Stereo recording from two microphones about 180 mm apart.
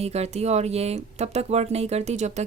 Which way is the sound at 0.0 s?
35° right (ahead or behind).